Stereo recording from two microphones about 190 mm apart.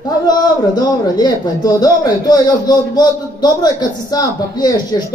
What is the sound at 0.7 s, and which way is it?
Speech, 20° left (ahead or behind).